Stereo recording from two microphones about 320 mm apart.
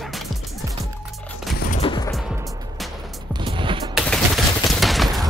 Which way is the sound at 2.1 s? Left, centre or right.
Centre.